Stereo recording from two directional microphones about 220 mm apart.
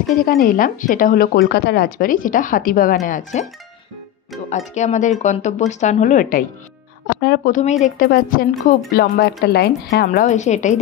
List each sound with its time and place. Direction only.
0.1 s speech: 40° left (ahead or behind)
7.2 s speech: 50° left (ahead or behind)
7.8 s speech: 40° left (ahead or behind)